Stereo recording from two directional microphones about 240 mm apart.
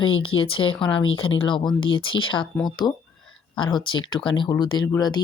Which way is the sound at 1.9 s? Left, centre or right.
Centre.